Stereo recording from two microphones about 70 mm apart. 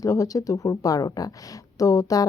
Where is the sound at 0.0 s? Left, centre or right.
Left.